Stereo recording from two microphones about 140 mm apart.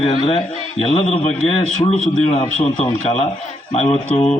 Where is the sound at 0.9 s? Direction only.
50° left (ahead or behind).